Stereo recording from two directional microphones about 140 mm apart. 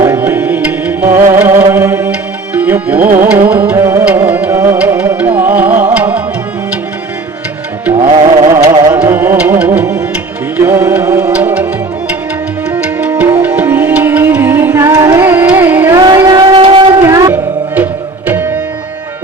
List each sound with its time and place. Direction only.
0.0 s music: 15° right (ahead or behind)
2.6 s tabla: 10° right (ahead or behind)
3.2 s music: 15° right (ahead or behind)
8.4 s music: 20° right (ahead or behind)
9.0 s music: 15° right (ahead or behind)
12.7 s music: 10° right (ahead or behind)
15.2 s carnatic music: 15° right (ahead or behind)
16.0 s a sound: 30° right (ahead or behind)
17.1 s music: 25° right (ahead or behind)